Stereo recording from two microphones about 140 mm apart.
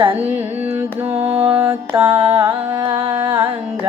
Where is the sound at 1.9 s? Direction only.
40° right (ahead or behind).